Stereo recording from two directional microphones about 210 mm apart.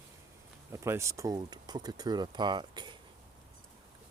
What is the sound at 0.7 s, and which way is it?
Speech, 15° right (ahead or behind).